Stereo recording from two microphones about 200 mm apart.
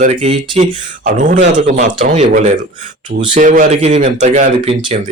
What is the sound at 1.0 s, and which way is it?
Speech, 40° right (ahead or behind).